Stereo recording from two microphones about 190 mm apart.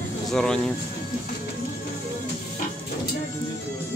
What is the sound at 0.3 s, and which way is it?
Speech, centre (ahead or behind).